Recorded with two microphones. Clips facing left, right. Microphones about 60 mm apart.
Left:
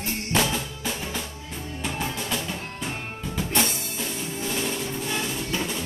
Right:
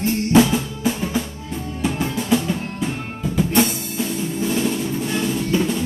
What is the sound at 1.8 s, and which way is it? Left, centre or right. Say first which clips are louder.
Music: right 9 dB; centre.